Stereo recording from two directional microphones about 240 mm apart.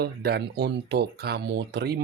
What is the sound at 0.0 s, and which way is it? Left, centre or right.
Speech, right.